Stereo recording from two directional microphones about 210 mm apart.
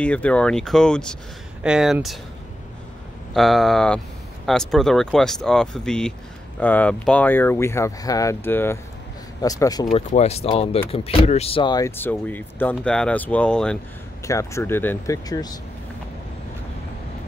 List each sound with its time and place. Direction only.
0.0 s speech: 5° left (ahead or behind)
3.3 s speech: centre (ahead or behind); by 9.8 s 15° left (ahead or behind)
9.9 s speech: 30° left (ahead or behind)